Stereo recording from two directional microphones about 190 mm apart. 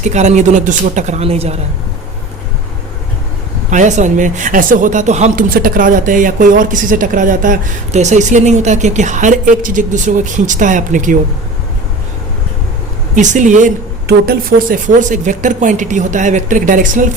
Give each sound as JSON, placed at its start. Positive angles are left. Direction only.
{"t": 0.0, "sound": "speech", "side_deg": -40}
{"t": 3.7, "sound": "speech", "side_deg": -40}
{"t": 13.1, "sound": "speech", "side_deg": -40}